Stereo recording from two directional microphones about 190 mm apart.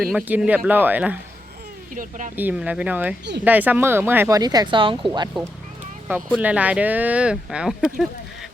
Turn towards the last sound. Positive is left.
turn(degrees=-5)  # may be behind; listen again after turning